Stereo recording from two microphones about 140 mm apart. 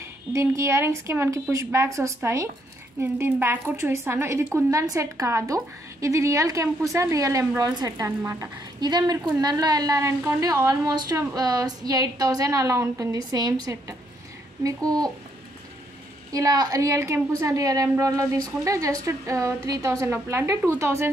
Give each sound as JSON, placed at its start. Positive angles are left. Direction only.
{"t": 0.0, "sound": "a woman's voice", "side_deg": -20}
{"t": 16.3, "sound": "a woman's voice", "side_deg": -25}